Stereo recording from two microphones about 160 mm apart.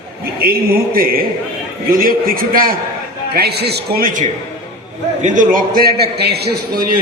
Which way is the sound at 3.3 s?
85° right.